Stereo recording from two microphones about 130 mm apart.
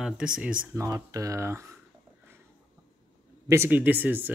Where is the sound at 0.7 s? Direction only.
25° right (ahead or behind).